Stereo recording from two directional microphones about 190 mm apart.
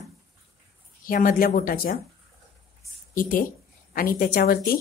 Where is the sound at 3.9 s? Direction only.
50° left (ahead or behind).